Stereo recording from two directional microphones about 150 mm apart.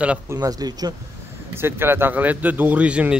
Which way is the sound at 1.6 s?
15° right (ahead or behind).